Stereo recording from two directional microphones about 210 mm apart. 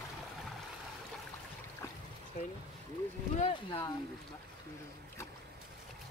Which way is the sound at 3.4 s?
25° left (ahead or behind).